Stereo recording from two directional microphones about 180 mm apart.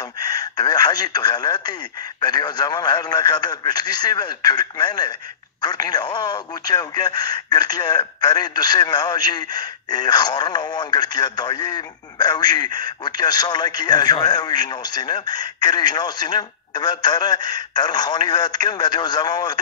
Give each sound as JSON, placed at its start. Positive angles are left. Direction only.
{"t": 0.2, "sound": "speech", "side_deg": 20}